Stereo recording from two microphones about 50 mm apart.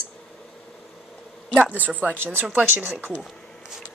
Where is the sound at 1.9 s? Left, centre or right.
Right.